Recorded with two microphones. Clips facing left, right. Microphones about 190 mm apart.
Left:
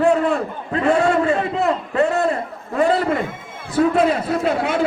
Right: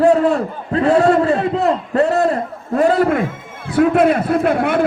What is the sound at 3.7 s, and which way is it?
A man's voice, 60° right (ahead or behind).